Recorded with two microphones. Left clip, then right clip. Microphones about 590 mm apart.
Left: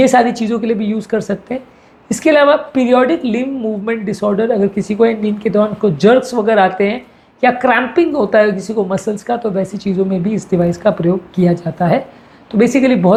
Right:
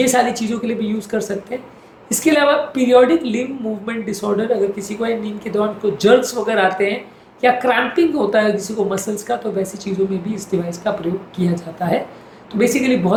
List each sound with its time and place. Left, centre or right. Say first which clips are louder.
0.0 s speech: left 5 dB; left